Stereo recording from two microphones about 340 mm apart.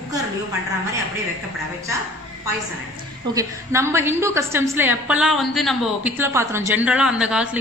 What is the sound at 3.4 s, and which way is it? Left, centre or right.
A woman's voice, centre.